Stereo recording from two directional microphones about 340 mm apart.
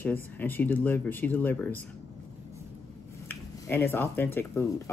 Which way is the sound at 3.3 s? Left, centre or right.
Centre.